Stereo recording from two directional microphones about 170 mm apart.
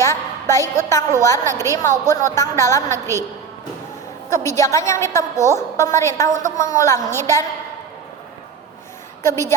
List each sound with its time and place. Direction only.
0.0 s a woman's voice: 15° left (ahead or behind)
4.3 s a woman's voice: 15° left (ahead or behind)
9.2 s a woman's voice: 15° left (ahead or behind)